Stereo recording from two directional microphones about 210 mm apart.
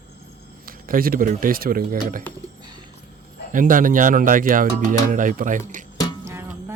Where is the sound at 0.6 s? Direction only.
45° right (ahead or behind).